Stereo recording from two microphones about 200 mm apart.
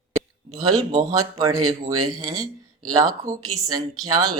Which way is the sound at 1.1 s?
15° right (ahead or behind).